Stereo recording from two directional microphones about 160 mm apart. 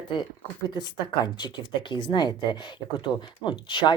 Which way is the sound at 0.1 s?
25° left (ahead or behind).